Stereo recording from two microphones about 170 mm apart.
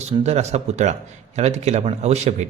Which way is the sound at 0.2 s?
40° right (ahead or behind).